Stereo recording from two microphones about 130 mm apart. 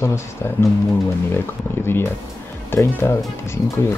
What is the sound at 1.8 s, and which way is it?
Speech, 20° left (ahead or behind).